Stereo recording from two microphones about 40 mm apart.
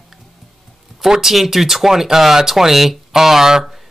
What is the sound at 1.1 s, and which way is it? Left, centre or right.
Speech, centre.